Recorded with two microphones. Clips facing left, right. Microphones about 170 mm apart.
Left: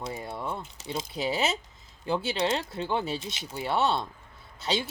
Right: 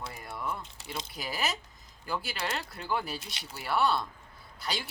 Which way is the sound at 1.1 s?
25° left (ahead or behind).